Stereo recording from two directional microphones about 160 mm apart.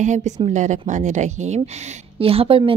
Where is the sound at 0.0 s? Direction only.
50° right (ahead or behind).